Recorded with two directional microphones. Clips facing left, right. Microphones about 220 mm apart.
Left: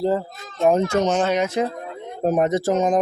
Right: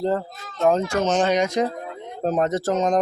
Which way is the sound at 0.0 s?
10° left (ahead or behind).